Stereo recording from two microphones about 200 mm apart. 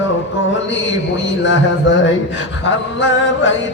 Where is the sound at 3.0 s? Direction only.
65° left (ahead or behind).